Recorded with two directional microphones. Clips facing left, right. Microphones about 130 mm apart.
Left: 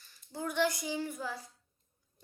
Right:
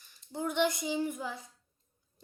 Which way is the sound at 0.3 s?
20° right (ahead or behind).